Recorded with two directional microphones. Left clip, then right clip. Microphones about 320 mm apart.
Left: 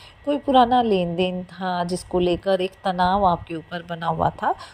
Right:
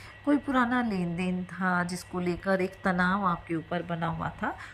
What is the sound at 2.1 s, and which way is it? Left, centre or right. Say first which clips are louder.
Speech: left 12 dB; centre.